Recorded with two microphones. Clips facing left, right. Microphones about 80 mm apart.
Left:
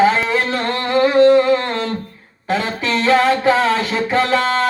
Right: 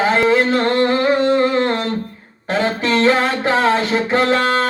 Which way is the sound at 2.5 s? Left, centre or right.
Right.